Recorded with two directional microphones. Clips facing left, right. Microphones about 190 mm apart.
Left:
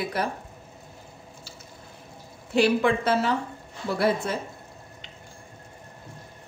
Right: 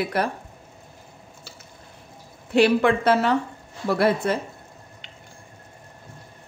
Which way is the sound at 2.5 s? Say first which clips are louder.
Right 3 dB; 65° right (ahead or behind).